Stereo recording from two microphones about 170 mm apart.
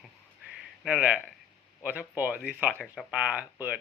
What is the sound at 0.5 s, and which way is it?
Speech, 5° right (ahead or behind).